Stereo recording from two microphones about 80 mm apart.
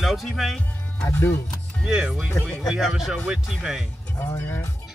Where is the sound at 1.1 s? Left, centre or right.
Left.